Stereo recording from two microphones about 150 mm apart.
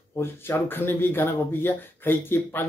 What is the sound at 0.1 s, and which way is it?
Speech, 15° left (ahead or behind).